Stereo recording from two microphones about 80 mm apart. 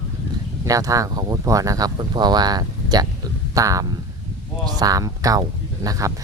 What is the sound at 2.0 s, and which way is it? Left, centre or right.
Speech, right.